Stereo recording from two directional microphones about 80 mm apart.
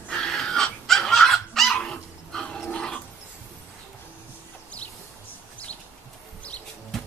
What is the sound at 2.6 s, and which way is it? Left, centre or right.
Dog, centre.